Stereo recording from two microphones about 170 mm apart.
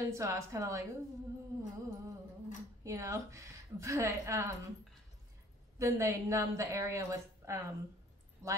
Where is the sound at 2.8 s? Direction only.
20° right (ahead or behind).